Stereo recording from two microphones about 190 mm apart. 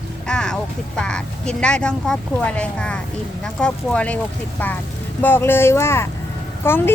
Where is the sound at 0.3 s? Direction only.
5° left (ahead or behind).